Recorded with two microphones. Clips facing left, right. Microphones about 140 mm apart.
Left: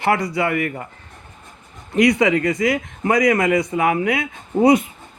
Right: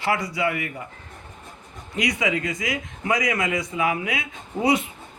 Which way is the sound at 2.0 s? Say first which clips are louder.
Left 9 dB; 50° left (ahead or behind).